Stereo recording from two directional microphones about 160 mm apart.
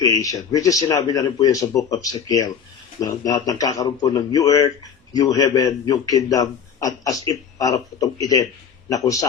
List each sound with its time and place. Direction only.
0.0 s a man's voice: 20° left (ahead or behind)